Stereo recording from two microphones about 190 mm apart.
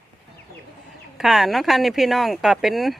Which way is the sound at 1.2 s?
Centre (ahead or behind).